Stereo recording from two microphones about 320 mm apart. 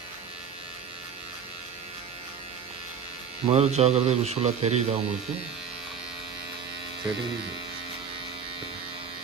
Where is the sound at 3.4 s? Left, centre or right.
Centre.